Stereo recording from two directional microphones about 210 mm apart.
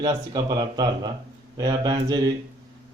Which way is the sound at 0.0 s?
20° right (ahead or behind).